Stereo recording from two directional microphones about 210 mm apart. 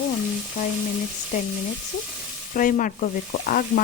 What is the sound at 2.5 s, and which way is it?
Speech, 40° left (ahead or behind).